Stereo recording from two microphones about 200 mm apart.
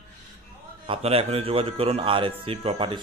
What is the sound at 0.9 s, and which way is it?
A man's voice, 30° right (ahead or behind).